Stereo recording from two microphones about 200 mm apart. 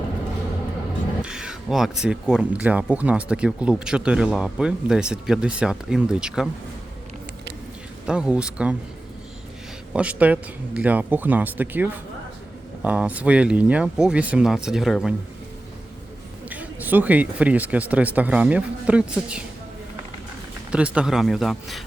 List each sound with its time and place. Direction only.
1.2 s speech: 5° right (ahead or behind)
8.0 s speech: 5° right (ahead or behind)
9.9 s speech: 5° right (ahead or behind)
16.5 s speech: 10° right (ahead or behind)
20.7 s speech: 5° right (ahead or behind)